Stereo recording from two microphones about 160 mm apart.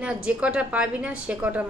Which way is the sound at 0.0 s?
5° right (ahead or behind).